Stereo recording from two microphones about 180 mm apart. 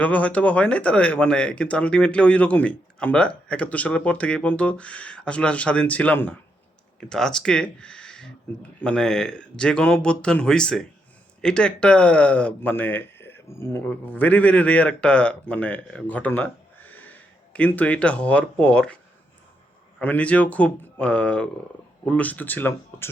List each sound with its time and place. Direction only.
0.0 s speech: 5° left (ahead or behind)
20.0 s speech: 10° left (ahead or behind)